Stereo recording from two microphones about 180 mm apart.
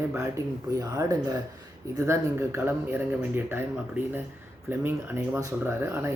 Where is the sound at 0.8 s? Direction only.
20° right (ahead or behind).